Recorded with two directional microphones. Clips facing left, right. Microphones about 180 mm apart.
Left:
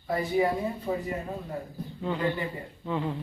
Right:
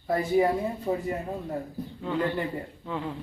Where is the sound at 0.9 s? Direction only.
15° right (ahead or behind).